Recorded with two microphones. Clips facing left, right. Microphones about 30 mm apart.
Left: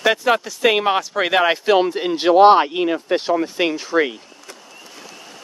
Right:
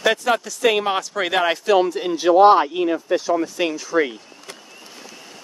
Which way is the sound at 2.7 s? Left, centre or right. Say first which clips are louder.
Left 1 dB; left.